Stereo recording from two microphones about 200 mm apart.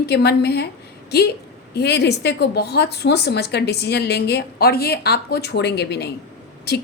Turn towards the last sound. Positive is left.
turn(degrees=55)  # may be behind; listen again after turning